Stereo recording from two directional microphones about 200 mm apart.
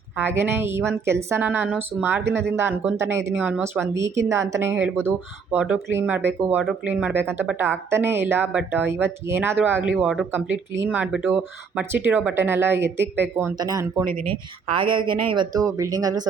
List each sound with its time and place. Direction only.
0.2 s a woman's voice: 10° right (ahead or behind)